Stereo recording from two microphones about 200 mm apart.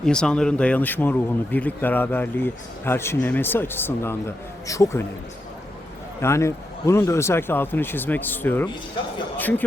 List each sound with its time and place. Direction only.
0.0 s speech: 5° left (ahead or behind)
6.2 s speech: 15° left (ahead or behind)